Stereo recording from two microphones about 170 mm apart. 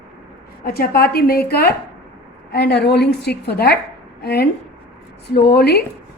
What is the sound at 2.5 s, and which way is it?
A woman's voice, 75° left (ahead or behind).